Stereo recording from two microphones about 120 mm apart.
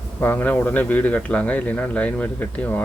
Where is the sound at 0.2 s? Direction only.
15° left (ahead or behind).